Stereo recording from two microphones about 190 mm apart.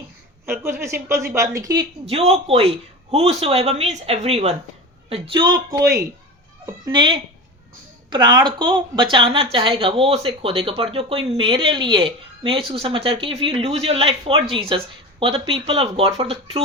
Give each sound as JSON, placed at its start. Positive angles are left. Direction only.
{"t": 0.6, "sound": "speech", "side_deg": -15}